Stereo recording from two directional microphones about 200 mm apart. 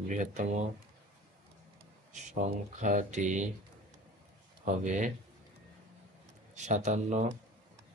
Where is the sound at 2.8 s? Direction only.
35° right (ahead or behind).